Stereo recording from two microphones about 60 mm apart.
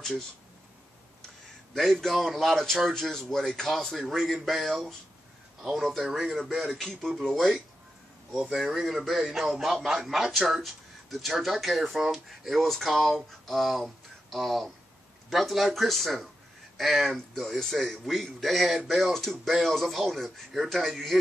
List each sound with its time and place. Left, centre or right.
1.7 s a man's voice: centre
8.5 s a man's voice: centre